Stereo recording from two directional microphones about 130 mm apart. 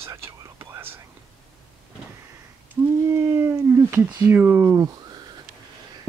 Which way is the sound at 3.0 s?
20° right (ahead or behind).